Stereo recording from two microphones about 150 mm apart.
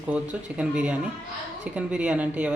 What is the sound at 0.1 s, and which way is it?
Speech, 5° right (ahead or behind).